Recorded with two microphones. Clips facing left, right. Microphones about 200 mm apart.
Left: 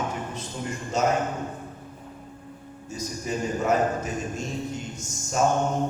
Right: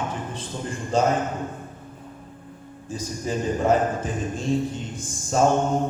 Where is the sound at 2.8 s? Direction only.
30° right (ahead or behind).